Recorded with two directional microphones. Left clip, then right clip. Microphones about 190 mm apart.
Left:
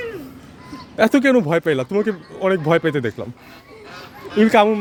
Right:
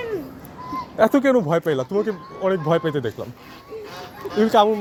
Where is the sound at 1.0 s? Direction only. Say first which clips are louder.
Left 2 dB; 45° left (ahead or behind).